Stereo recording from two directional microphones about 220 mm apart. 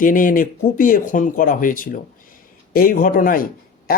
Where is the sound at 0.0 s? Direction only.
40° left (ahead or behind).